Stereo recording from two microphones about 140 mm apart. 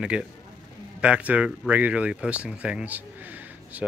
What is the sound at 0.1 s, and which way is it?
Speech, 5° right (ahead or behind).